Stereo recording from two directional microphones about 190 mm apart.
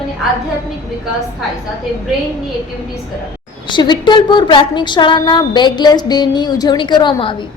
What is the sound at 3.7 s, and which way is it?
A woman's voice, 25° left (ahead or behind).